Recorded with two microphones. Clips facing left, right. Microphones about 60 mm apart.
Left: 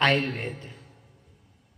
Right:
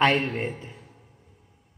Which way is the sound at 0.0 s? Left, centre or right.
Centre.